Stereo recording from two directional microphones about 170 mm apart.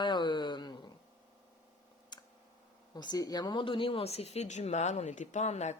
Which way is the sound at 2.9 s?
25° left (ahead or behind).